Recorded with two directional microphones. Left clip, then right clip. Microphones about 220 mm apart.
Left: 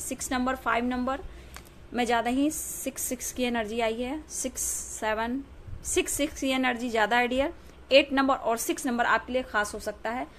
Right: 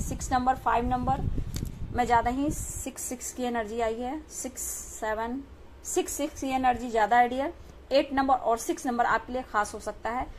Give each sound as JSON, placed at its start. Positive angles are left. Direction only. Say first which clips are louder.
{"t": 0.4, "sound": "a woman's voice", "louder": "right 2 dB", "side_deg": 30}